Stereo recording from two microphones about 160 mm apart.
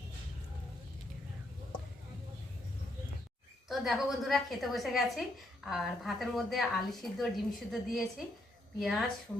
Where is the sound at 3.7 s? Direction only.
Centre (ahead or behind).